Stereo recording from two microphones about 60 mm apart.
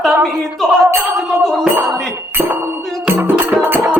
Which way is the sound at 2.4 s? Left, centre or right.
Right.